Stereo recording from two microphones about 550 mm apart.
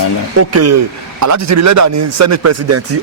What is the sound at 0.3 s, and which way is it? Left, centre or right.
A man's voice, right.